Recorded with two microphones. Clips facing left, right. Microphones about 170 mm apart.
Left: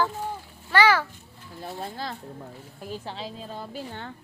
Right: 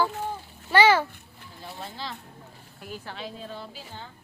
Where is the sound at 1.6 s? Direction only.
45° left (ahead or behind).